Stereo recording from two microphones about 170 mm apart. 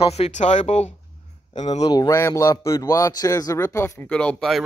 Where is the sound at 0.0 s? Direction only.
40° left (ahead or behind).